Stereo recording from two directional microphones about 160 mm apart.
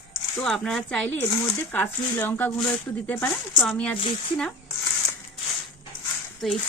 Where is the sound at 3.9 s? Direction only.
35° left (ahead or behind).